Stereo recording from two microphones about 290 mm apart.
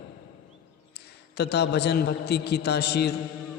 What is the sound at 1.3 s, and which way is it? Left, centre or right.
A man's voice, left.